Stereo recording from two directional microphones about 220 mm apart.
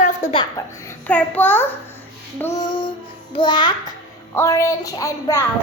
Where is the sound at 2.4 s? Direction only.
15° left (ahead or behind).